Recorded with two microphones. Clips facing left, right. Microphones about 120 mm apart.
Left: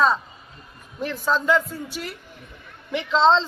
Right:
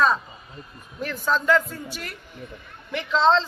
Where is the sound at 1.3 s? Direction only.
20° left (ahead or behind).